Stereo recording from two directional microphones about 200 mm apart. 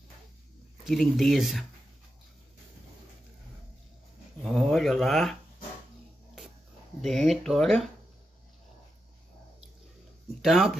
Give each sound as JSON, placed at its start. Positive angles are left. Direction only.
{"t": 0.8, "sound": "speech", "side_deg": 0}
{"t": 4.4, "sound": "speech", "side_deg": 0}
{"t": 7.0, "sound": "speech", "side_deg": 0}
{"t": 10.4, "sound": "speech", "side_deg": 0}